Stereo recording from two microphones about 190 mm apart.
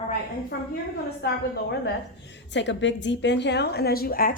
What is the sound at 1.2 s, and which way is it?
Speech, 60° left (ahead or behind).